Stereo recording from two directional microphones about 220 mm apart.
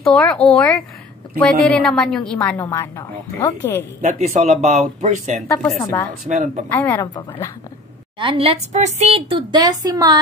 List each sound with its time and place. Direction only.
0.0 s a woman's voice: centre (ahead or behind)
2.5 s a woman's voice: 15° left (ahead or behind)
4.1 s speech: 30° right (ahead or behind)
5.5 s a woman's voice: 5° left (ahead or behind)
6.2 s speech: 35° right (ahead or behind)
6.7 s a woman's voice: 10° left (ahead or behind)
8.2 s a woman's voice: 25° right (ahead or behind)